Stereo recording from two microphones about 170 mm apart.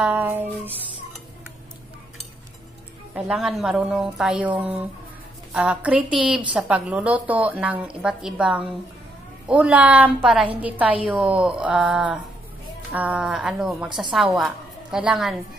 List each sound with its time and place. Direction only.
0.0 s a woman's voice: 10° right (ahead or behind)
3.2 s a woman's voice: 5° right (ahead or behind)